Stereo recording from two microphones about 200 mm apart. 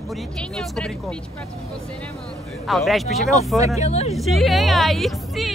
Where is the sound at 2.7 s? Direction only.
Centre (ahead or behind).